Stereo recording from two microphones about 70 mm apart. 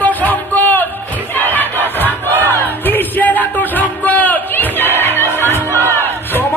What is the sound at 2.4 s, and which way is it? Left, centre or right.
Music, left.